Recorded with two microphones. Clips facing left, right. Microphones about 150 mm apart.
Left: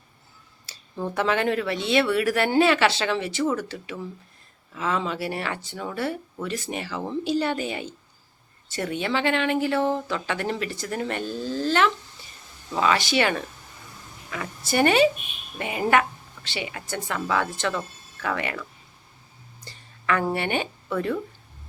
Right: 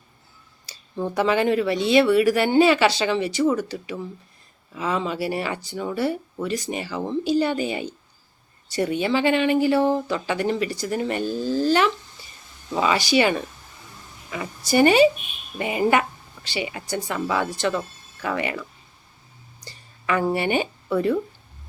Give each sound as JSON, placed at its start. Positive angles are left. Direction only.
{"t": 0.9, "sound": "speech", "side_deg": 0}
{"t": 13.0, "sound": "speech", "side_deg": 0}
{"t": 14.7, "sound": "speech", "side_deg": 0}
{"t": 17.2, "sound": "speech", "side_deg": -15}
{"t": 17.5, "sound": "speech", "side_deg": 0}
{"t": 20.2, "sound": "speech", "side_deg": -5}